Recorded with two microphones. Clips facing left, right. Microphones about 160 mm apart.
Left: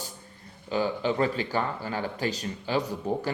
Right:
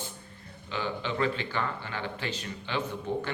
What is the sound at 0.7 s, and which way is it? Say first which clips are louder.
Speech: left 6 dB; 40° left (ahead or behind).